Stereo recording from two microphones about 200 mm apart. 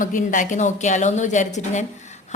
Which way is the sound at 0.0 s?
40° left (ahead or behind).